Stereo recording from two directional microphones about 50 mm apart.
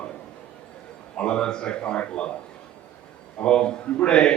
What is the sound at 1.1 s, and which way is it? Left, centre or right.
A man's voice, centre.